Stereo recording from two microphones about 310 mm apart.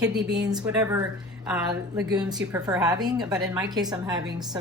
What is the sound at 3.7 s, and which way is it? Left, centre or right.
Speech, centre.